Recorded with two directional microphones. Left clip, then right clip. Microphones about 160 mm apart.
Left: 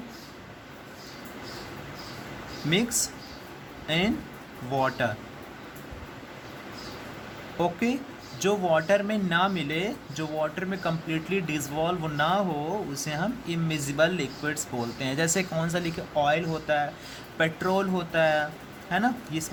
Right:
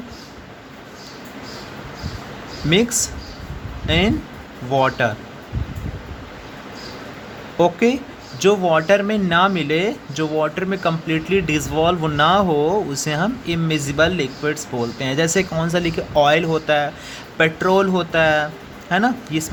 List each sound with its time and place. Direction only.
2.6 s speech: 30° right (ahead or behind)
7.6 s speech: 30° right (ahead or behind)
16.1 s speech: 40° right (ahead or behind)